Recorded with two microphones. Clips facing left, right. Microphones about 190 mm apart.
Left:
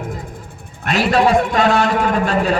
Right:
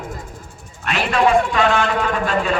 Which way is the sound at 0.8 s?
40° left (ahead or behind).